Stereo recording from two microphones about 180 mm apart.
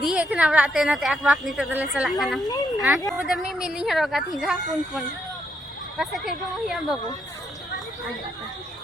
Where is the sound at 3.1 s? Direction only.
Centre (ahead or behind).